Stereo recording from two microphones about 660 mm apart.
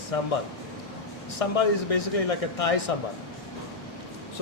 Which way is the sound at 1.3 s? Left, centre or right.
Left.